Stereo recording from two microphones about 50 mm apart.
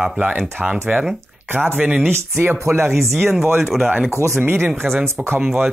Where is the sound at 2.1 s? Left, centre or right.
Right.